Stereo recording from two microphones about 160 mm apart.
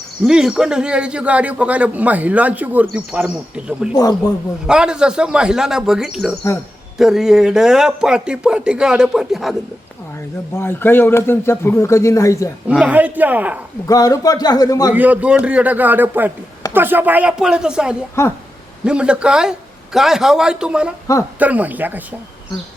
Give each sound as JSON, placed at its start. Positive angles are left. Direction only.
{"t": 0.3, "sound": "a man's voice", "side_deg": -5}
{"t": 10.5, "sound": "speech", "side_deg": 15}
{"t": 12.8, "sound": "a man's voice", "side_deg": -10}
{"t": 13.8, "sound": "a man's voice", "side_deg": 20}
{"t": 14.9, "sound": "a man's voice", "side_deg": -10}
{"t": 18.2, "sound": "speech", "side_deg": 15}
{"t": 18.9, "sound": "a man's voice", "side_deg": -5}